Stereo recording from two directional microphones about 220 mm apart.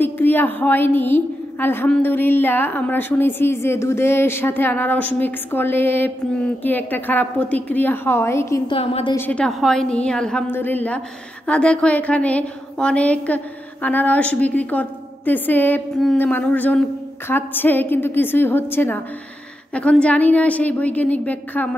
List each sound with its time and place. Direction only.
0.0 s a woman's voice: 10° left (ahead or behind)
8.7 s a woman's voice: 25° left (ahead or behind)
9.1 s a woman's voice: 10° left (ahead or behind)